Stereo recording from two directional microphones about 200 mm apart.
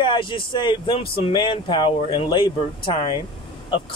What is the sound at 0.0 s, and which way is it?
Speech, 25° left (ahead or behind).